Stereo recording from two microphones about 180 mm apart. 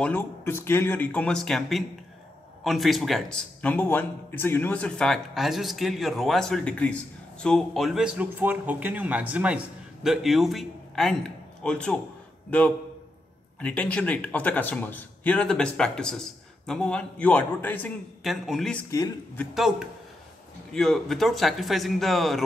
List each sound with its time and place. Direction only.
0.0 s a man's voice: 10° left (ahead or behind)
18.2 s a man's voice: centre (ahead or behind)
18.9 s speech: 15° left (ahead or behind)
19.5 s a man's voice: centre (ahead or behind)